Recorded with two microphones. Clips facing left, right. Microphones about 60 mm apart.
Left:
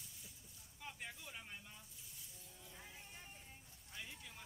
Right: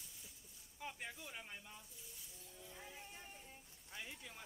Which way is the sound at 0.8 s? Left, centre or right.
Centre.